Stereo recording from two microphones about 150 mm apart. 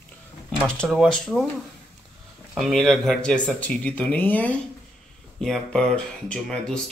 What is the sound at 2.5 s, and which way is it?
Speech, centre (ahead or behind).